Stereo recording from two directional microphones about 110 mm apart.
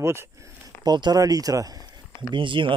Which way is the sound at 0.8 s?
40° right (ahead or behind).